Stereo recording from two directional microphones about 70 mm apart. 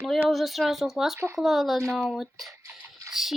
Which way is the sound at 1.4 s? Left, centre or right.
Centre.